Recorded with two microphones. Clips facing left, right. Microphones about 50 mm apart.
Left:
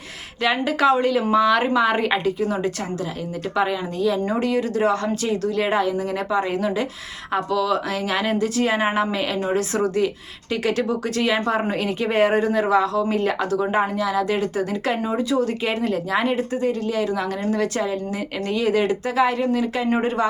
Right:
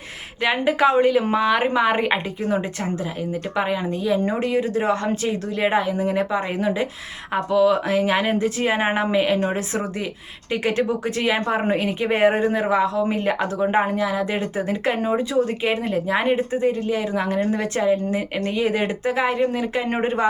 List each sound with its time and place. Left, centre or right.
0.4 s speech: right